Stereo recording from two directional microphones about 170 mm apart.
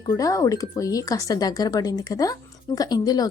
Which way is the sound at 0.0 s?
20° left (ahead or behind).